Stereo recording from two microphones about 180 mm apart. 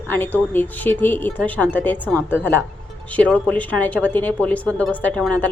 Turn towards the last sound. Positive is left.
turn(degrees=5)  # may be behind; listen again after turning